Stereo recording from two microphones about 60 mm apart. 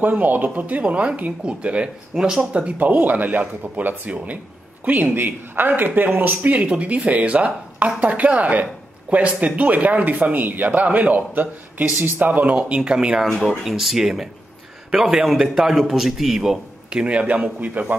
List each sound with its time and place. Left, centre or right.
0.0 s speech: right
12.5 s a man's voice: centre
13.2 s a man's voice: centre; by 17.9 s right